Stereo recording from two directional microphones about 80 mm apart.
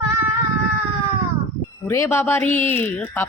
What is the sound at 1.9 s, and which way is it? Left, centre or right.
Speech, left.